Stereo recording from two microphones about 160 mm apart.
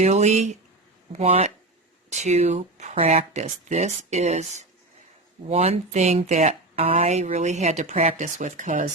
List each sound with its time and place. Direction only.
0.0 s speech: 45° right (ahead or behind)